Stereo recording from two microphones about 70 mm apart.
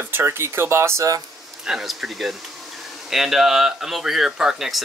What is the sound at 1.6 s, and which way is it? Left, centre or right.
Speech, centre.